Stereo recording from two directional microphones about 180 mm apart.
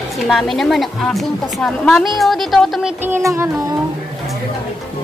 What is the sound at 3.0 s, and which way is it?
Child singing, 15° right (ahead or behind).